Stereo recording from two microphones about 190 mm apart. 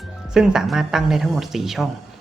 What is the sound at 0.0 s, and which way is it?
Speech, 5° right (ahead or behind).